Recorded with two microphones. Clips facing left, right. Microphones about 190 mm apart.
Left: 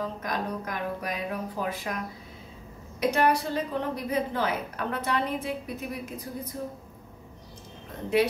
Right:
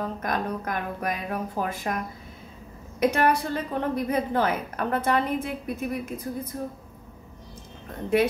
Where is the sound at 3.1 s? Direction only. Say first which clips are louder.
Right 1 dB; 55° right (ahead or behind).